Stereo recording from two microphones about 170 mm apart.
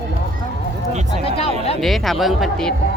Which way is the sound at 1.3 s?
35° left (ahead or behind).